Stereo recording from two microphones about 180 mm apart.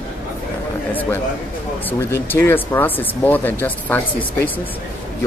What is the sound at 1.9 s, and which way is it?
Speech, 15° left (ahead or behind).